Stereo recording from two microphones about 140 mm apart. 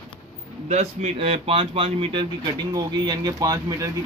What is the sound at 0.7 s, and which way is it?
Speech, 55° right (ahead or behind).